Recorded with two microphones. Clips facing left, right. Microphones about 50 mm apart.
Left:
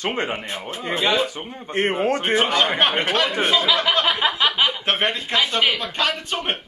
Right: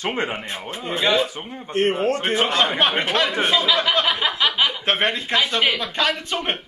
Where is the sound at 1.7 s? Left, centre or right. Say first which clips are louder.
Right 1 dB; centre.